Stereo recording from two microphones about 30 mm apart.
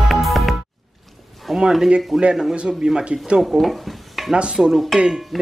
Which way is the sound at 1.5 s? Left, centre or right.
Centre.